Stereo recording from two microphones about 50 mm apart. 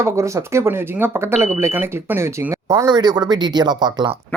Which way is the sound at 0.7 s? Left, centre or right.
Right.